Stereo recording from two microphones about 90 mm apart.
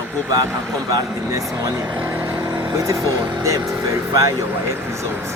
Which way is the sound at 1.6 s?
35° right (ahead or behind).